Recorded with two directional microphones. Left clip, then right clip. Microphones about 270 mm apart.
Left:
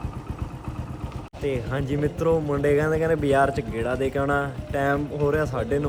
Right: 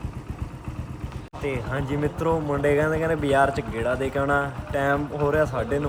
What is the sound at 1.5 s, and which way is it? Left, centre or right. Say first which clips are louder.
Speech: left 1 dB; centre.